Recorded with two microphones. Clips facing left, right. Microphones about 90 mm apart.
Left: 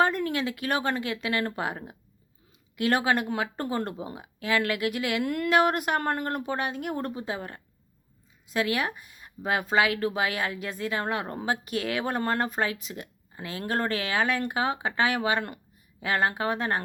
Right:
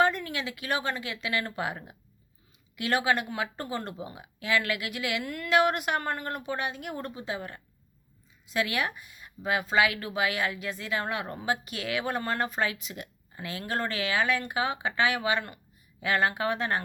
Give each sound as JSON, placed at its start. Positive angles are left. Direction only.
{"t": 0.0, "sound": "speech", "side_deg": 40}